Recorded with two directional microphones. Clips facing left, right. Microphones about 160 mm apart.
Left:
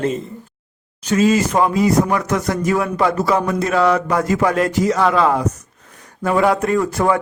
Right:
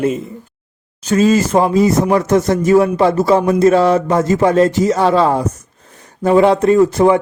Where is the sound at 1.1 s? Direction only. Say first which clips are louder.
Right 3 dB; 30° right (ahead or behind).